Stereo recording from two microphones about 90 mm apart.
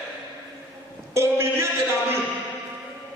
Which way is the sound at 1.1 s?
30° right (ahead or behind).